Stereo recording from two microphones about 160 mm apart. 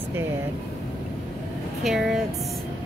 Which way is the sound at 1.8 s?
Centre (ahead or behind).